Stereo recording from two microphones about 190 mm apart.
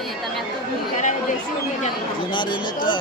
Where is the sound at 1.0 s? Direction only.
40° left (ahead or behind).